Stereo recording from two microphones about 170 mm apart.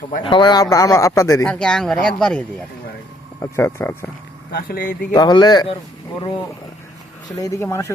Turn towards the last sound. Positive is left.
turn(degrees=15)  # may be behind; listen again after turning